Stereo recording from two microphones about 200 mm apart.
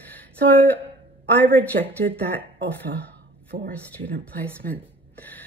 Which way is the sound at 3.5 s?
45° right (ahead or behind).